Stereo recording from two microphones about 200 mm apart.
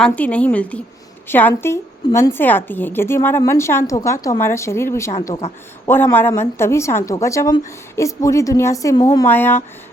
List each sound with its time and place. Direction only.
0.0 s a woman's voice: 5° left (ahead or behind)